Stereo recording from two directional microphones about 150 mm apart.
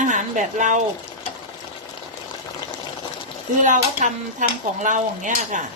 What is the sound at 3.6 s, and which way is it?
Speech, 55° right (ahead or behind).